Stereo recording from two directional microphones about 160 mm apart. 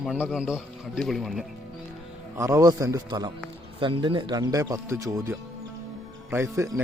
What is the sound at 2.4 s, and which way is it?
Speech, 20° right (ahead or behind).